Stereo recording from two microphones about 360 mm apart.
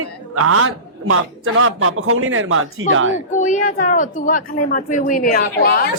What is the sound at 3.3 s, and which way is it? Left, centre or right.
Speech, left.